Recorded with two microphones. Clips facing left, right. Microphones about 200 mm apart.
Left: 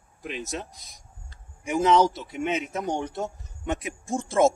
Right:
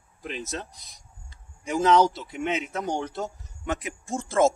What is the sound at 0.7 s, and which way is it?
Speech, centre (ahead or behind).